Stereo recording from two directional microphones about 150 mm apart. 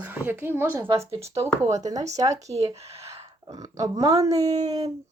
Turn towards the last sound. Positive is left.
turn(degrees=-25)  # may be behind; listen again after turning